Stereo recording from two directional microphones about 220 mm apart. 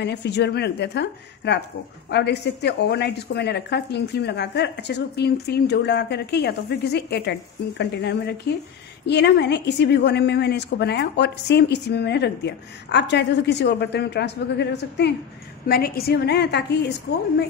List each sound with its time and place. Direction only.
0.0 s a woman's voice: 50° left (ahead or behind)